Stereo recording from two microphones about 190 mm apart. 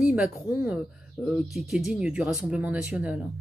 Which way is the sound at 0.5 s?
10° right (ahead or behind).